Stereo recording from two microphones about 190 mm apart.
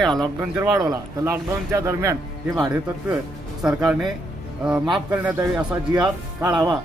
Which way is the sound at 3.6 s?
5° right (ahead or behind).